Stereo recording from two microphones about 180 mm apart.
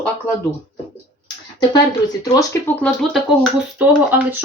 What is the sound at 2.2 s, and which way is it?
Speech, 15° left (ahead or behind).